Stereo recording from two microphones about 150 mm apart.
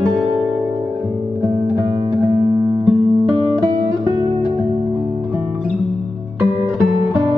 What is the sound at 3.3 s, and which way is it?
Music, 30° right (ahead or behind).